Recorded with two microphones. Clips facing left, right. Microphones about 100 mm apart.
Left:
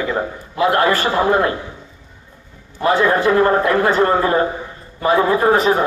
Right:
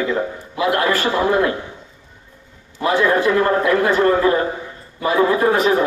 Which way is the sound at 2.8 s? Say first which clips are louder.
Left 1 dB; 35° left (ahead or behind).